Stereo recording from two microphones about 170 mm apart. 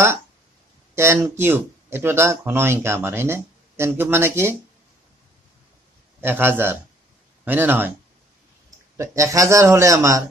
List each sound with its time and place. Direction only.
0.9 s speech: 15° right (ahead or behind)
6.2 s a man's voice: 10° right (ahead or behind)